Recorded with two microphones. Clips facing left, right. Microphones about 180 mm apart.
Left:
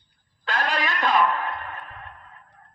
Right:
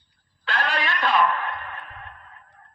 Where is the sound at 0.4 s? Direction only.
40° left (ahead or behind).